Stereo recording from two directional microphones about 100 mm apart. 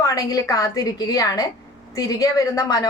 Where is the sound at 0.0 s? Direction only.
35° left (ahead or behind).